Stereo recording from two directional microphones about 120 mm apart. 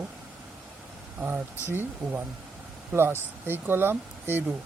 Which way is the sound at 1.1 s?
15° right (ahead or behind).